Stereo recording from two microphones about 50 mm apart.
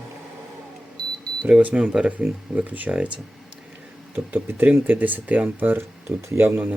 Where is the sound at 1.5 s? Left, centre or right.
Right.